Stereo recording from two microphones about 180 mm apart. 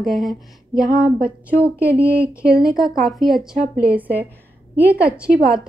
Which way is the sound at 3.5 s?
55° right (ahead or behind).